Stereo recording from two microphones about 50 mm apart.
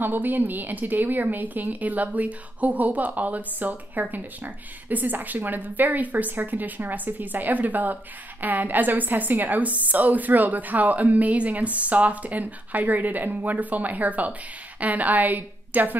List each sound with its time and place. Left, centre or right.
0.0 s a woman's voice: right